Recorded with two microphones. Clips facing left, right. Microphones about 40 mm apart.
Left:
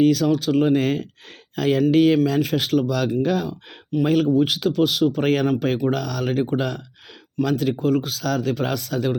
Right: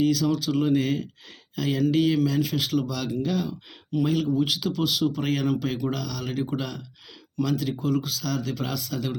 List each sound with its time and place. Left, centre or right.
0.0 s speech: left
4.3 s speech: left